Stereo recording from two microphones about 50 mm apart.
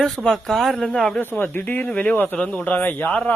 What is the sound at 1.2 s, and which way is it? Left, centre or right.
Speech, left.